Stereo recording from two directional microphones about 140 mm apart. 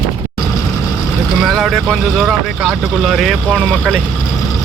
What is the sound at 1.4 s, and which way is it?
Speech, centre (ahead or behind).